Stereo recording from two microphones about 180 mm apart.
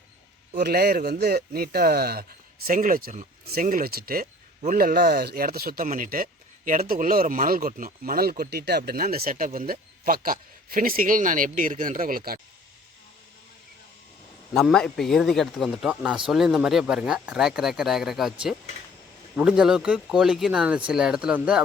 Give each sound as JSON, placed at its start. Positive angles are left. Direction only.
{"t": 0.5, "sound": "speech", "side_deg": -60}
{"t": 14.5, "sound": "speech", "side_deg": 0}